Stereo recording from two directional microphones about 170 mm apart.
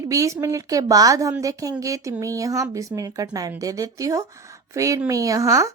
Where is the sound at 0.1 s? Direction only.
20° right (ahead or behind).